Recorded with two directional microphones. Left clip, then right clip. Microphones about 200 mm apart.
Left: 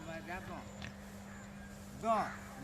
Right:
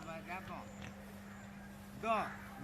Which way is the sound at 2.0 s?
60° left (ahead or behind).